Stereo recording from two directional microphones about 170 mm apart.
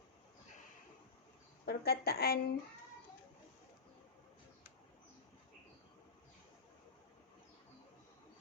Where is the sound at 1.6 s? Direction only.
65° left (ahead or behind).